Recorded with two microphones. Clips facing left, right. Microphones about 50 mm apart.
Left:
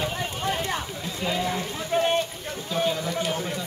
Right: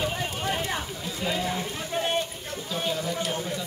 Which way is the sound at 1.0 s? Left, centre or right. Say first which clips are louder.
Left 2 dB; centre.